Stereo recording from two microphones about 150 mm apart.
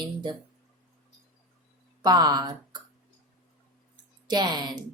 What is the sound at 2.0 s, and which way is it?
Speech, 25° right (ahead or behind).